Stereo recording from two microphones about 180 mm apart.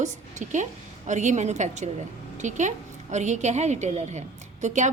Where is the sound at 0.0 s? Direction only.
40° right (ahead or behind).